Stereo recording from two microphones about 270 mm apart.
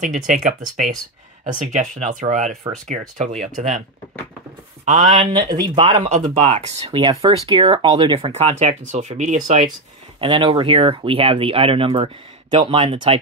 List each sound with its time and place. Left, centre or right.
0.0 s speech: right
4.8 s speech: right